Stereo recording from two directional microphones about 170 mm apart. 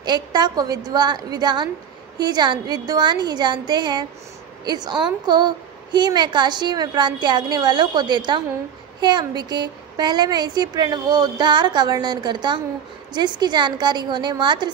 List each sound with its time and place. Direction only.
0.0 s a woman's voice: 25° right (ahead or behind)